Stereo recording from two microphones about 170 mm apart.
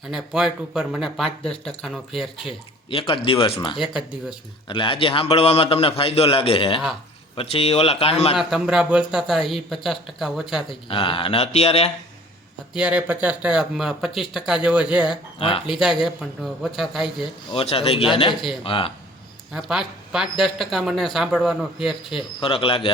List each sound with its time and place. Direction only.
0.1 s speech: centre (ahead or behind)
2.9 s a man's voice: 30° left (ahead or behind)
8.4 s speech: centre (ahead or behind)
10.8 s a man's voice: 30° left (ahead or behind)
12.7 s speech: 5° right (ahead or behind)
15.4 s a man's voice: 35° left (ahead or behind)
15.6 s speech: centre (ahead or behind)
17.5 s a man's voice: 35° left (ahead or behind)
19.5 s speech: centre (ahead or behind)
22.4 s a man's voice: 30° left (ahead or behind)